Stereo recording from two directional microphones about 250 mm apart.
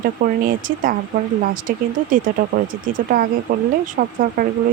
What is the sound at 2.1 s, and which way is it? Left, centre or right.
Speech, right.